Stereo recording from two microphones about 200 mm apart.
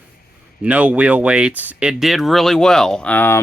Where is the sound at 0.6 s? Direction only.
5° right (ahead or behind).